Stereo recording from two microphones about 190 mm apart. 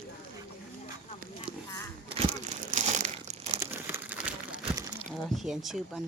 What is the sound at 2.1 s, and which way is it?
Crumpling, 35° right (ahead or behind).